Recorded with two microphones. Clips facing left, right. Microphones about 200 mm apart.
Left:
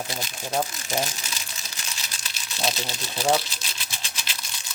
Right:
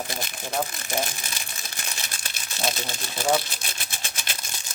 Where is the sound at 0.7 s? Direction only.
55° right (ahead or behind).